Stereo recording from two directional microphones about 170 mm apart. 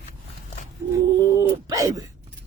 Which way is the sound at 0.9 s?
20° right (ahead or behind).